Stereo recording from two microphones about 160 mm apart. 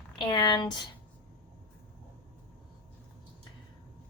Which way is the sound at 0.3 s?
30° left (ahead or behind).